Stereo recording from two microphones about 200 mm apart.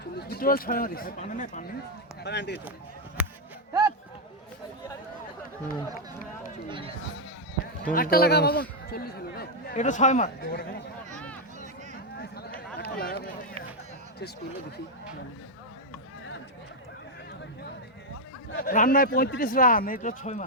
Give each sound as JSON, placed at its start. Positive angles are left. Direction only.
{"t": 0.0, "sound": "speech", "side_deg": 50}
{"t": 2.2, "sound": "speech", "side_deg": 60}
{"t": 3.7, "sound": "a sound", "side_deg": -15}
{"t": 6.7, "sound": "speech", "side_deg": -25}
{"t": 7.9, "sound": "speech", "side_deg": 45}
{"t": 12.1, "sound": "a sound", "side_deg": 55}
{"t": 18.5, "sound": "speech", "side_deg": 40}